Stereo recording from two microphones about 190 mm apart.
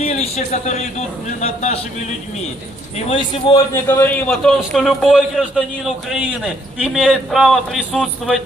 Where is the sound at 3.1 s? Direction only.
25° left (ahead or behind).